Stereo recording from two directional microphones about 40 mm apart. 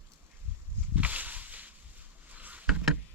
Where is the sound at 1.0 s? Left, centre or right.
Right.